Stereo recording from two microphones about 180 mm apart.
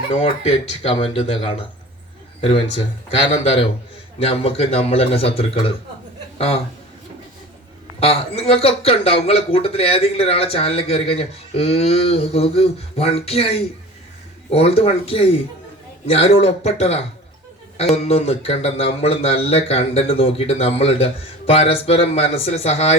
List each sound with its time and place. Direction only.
0.1 s a man's voice: 35° left (ahead or behind)
7.9 s a man's voice: 35° left (ahead or behind)